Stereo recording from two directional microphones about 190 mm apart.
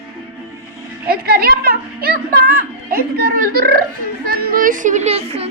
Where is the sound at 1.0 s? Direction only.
50° right (ahead or behind).